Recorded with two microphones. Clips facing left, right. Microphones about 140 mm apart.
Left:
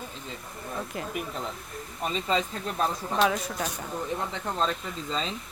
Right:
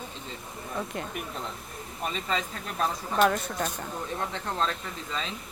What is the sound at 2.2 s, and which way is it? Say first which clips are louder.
Speech: left 4 dB; centre (ahead or behind).